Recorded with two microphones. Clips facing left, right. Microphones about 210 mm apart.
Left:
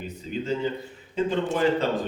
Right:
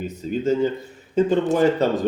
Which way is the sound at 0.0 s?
45° right (ahead or behind).